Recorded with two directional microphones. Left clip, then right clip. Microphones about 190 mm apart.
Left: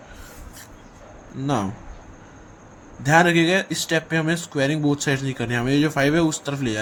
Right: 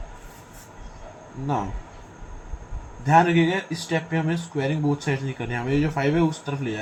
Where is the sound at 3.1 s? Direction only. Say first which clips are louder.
Left 2 dB; 50° left (ahead or behind).